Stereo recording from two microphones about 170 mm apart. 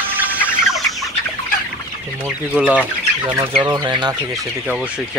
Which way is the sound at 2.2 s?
10° right (ahead or behind).